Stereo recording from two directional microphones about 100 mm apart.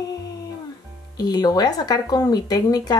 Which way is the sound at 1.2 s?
40° left (ahead or behind).